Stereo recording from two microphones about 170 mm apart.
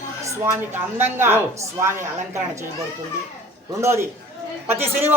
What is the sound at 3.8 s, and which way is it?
Speech, 15° right (ahead or behind).